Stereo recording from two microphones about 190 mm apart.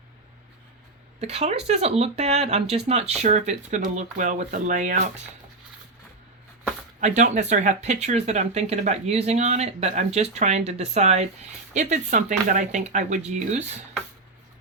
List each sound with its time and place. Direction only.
1.2 s speech: 35° right (ahead or behind)
7.2 s speech: 40° right (ahead or behind)